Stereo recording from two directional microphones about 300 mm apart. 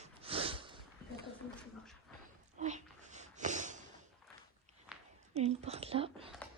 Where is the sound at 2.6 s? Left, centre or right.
Right.